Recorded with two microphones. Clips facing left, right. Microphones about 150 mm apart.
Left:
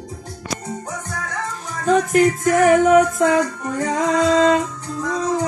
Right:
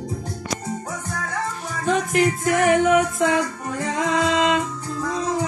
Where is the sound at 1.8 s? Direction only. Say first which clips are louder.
Left 5 dB; 40° left (ahead or behind).